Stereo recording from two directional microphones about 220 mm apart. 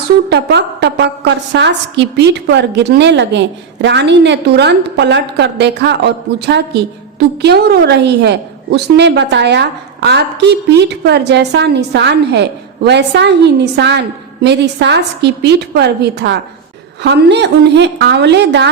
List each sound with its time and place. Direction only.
0.3 s a woman's voice: 50° right (ahead or behind)